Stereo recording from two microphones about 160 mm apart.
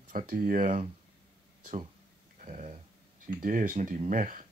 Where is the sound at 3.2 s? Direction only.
60° right (ahead or behind).